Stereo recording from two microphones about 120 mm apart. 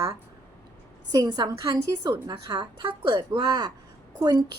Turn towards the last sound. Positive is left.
turn(degrees=-35)  # may be behind; listen again after turning